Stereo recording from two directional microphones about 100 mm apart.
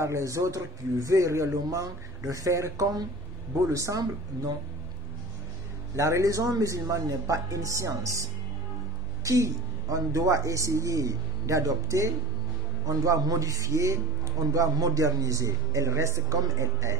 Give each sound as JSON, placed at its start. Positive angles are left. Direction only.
{"t": 0.0, "sound": "speech", "side_deg": -30}
{"t": 5.9, "sound": "speech", "side_deg": -30}